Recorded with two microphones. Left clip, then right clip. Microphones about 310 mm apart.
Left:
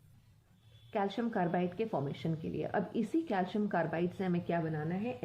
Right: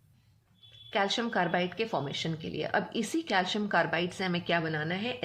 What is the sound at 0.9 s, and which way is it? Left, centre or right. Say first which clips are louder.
Speech: right 6 dB; centre.